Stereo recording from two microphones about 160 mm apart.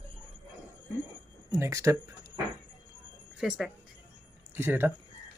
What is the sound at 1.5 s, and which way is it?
Speech, 20° right (ahead or behind).